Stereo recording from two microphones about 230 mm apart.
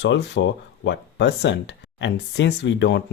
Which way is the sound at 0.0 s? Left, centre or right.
Left.